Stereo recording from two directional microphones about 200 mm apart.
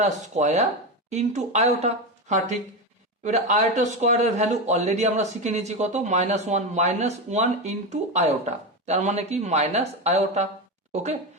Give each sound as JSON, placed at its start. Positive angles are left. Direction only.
{"t": 0.0, "sound": "speech", "side_deg": -35}